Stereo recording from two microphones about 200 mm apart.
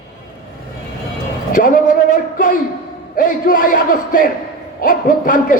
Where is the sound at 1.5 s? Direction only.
40° left (ahead or behind).